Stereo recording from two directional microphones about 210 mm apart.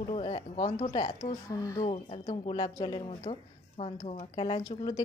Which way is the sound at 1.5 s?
15° left (ahead or behind).